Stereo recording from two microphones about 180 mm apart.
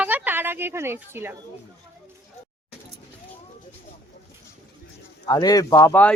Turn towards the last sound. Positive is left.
turn(degrees=15)  # may be behind; listen again after turning